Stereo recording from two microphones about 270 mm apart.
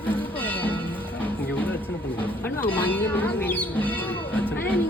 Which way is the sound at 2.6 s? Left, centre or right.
Centre.